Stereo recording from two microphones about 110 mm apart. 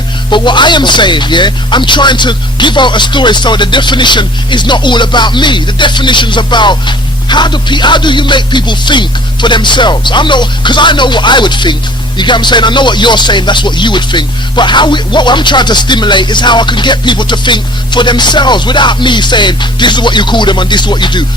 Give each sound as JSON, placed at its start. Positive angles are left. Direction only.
{"t": 0.3, "sound": "speech", "side_deg": 45}